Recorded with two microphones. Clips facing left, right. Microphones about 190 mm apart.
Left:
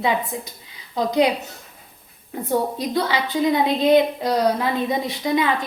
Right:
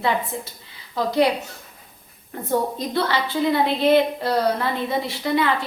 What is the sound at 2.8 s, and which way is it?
A woman's voice, 15° left (ahead or behind).